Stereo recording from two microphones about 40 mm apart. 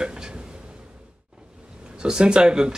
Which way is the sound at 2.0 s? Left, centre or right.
Right.